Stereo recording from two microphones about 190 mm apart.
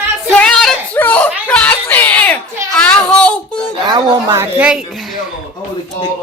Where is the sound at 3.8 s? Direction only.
20° right (ahead or behind).